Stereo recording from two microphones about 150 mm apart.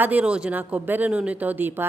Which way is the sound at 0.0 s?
10° right (ahead or behind).